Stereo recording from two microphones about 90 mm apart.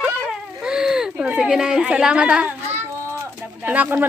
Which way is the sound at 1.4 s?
5° right (ahead or behind).